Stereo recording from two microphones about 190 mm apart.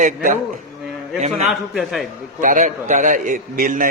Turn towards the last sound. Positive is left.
turn(degrees=-45)  # may be behind; listen again after turning